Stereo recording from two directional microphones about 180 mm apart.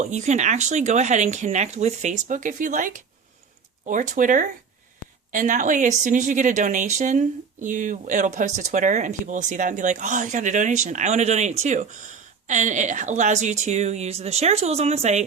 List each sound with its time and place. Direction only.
0.0 s speech: 40° right (ahead or behind)